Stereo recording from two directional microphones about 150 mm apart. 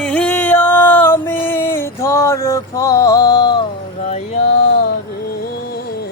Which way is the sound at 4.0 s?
45° left (ahead or behind).